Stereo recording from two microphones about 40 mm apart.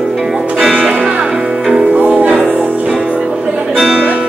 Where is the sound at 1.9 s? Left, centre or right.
Right.